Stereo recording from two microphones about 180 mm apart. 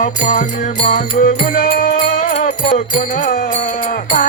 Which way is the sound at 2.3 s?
40° left (ahead or behind).